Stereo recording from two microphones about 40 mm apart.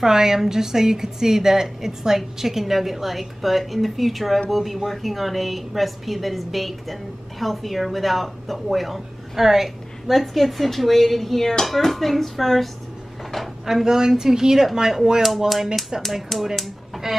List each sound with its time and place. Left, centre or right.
0.0 s a woman's voice: centre
13.7 s a woman's voice: centre